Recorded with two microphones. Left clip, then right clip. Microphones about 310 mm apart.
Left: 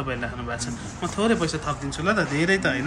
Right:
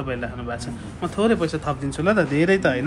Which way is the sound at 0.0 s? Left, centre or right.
Centre.